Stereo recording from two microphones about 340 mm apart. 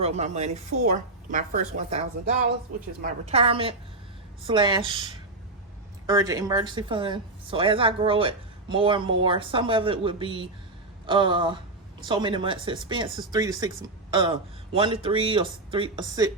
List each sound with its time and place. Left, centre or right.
0.0 s speech: centre